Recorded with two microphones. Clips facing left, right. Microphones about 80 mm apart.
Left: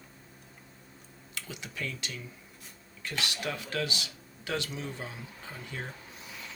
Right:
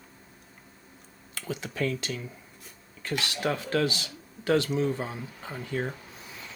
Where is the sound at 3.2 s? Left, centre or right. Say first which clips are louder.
Right 5 dB; right.